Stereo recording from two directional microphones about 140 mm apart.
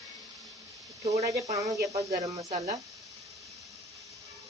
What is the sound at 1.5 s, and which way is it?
Speech, 55° right (ahead or behind).